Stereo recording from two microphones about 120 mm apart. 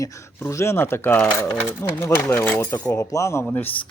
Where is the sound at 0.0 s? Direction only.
25° left (ahead or behind).